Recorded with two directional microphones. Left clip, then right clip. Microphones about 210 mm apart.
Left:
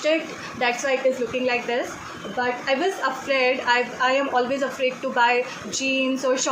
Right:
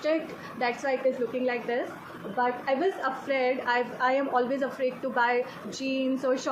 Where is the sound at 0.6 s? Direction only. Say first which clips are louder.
Left 5 dB; 40° left (ahead or behind).